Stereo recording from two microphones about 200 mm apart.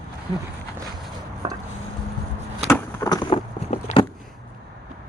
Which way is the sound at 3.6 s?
35° left (ahead or behind).